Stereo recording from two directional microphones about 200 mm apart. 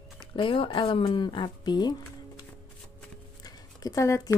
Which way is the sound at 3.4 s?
20° left (ahead or behind).